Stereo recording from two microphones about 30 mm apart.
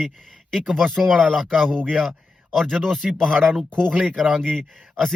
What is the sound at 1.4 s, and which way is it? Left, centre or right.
Speech, centre.